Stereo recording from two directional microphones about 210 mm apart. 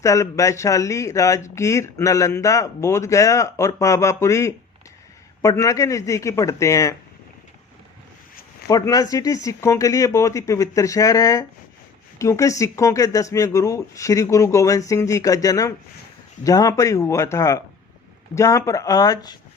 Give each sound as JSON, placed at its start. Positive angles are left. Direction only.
{"t": 0.0, "sound": "speech", "side_deg": 15}
{"t": 8.6, "sound": "speech", "side_deg": 15}